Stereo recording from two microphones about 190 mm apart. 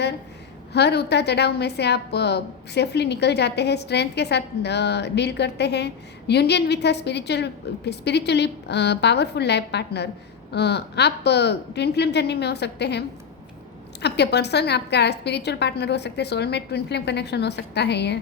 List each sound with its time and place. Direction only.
0.7 s a woman's voice: 60° left (ahead or behind)